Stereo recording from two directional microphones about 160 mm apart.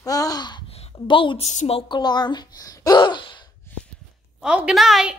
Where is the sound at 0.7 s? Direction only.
35° left (ahead or behind).